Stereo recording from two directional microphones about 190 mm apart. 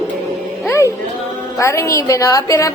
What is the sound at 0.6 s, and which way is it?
Music, 15° left (ahead or behind).